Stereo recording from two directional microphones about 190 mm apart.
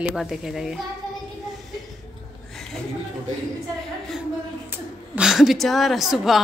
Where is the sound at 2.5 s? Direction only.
Centre (ahead or behind).